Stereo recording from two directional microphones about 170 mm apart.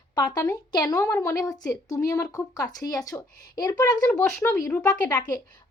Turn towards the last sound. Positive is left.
turn(degrees=15)  # may be behind; listen again after turning